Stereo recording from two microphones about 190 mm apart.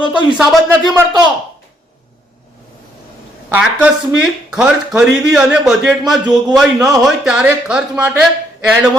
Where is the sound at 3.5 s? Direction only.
5° right (ahead or behind).